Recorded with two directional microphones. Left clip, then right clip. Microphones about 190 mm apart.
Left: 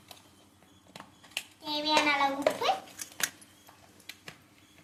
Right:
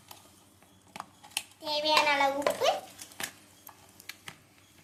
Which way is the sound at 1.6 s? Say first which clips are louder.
Right 1 dB; 55° right (ahead or behind).